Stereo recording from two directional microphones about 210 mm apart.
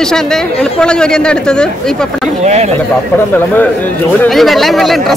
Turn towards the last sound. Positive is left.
turn(degrees=0)  # may be behind; listen again after turning